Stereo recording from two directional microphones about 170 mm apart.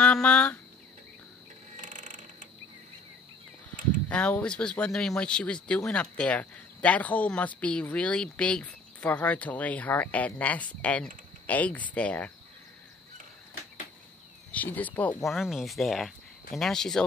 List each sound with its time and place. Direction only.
0.0 s speech: 5° left (ahead or behind)
1.8 s a sound: 50° right (ahead or behind)
4.1 s speech: 10° left (ahead or behind)
14.5 s speech: 10° left (ahead or behind)